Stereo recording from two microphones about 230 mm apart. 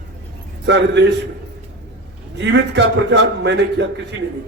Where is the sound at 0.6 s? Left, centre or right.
Right.